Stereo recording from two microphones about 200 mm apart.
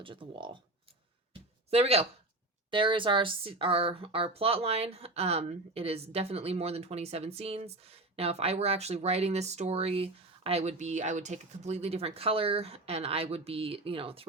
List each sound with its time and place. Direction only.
0.0 s speech: 25° right (ahead or behind)
1.3 s a sound: 30° right (ahead or behind)
2.6 s speech: 25° right (ahead or behind)